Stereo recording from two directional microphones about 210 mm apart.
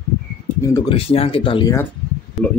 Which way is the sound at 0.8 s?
25° left (ahead or behind).